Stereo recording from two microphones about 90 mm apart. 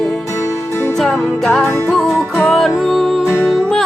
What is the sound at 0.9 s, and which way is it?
Music, 5° left (ahead or behind).